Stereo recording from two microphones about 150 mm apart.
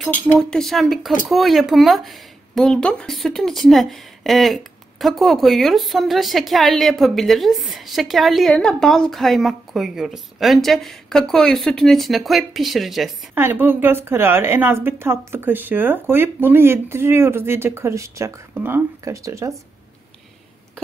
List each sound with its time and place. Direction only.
0.4 s speech: 5° left (ahead or behind)
13.3 s a woman's voice: 15° right (ahead or behind)